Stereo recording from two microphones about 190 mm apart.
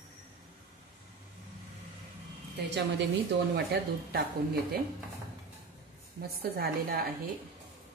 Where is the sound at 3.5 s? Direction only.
55° right (ahead or behind).